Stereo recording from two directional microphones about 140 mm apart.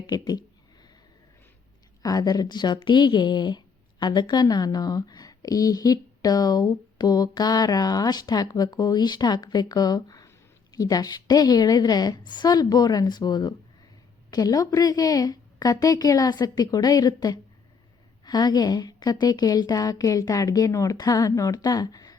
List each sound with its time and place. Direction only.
0.1 s a woman's voice: 30° left (ahead or behind)
2.0 s a woman's voice: 25° left (ahead or behind)